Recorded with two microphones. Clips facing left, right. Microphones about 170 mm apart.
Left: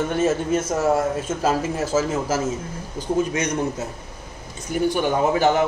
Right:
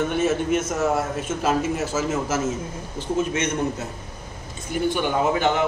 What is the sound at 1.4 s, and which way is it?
Speech, 35° left (ahead or behind).